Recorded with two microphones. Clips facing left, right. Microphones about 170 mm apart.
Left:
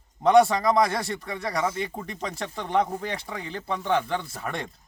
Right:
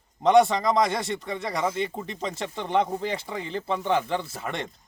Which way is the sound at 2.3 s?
Centre (ahead or behind).